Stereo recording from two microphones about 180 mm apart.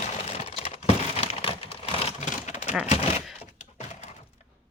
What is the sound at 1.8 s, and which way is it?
Typewriter, 35° left (ahead or behind).